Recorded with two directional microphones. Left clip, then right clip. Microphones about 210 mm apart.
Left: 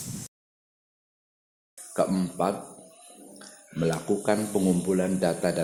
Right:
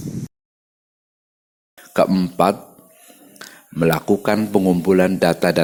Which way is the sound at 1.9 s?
30° right (ahead or behind).